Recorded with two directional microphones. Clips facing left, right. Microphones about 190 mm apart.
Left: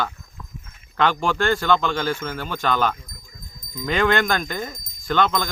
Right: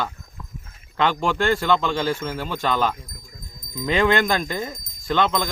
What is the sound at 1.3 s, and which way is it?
Speech, 25° right (ahead or behind).